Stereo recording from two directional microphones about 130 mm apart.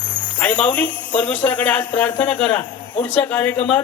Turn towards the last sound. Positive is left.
turn(degrees=10)  # may be behind; listen again after turning